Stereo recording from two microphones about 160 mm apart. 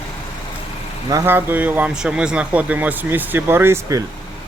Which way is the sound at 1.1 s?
15° right (ahead or behind).